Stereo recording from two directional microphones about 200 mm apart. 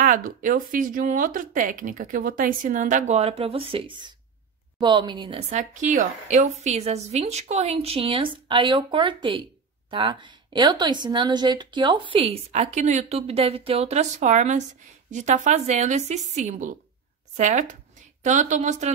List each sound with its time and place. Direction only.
0.0 s a woman's voice: 45° right (ahead or behind); by 5.4 s 20° right (ahead or behind)
5.5 s a woman's voice: 40° right (ahead or behind)